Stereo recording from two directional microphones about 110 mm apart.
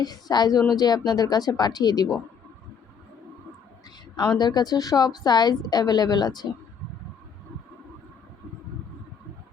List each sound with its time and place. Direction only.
0.0 s a woman's voice: 35° left (ahead or behind)
4.4 s a woman's voice: 40° left (ahead or behind)